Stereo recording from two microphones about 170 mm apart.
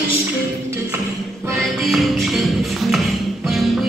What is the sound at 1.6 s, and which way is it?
Music, centre (ahead or behind).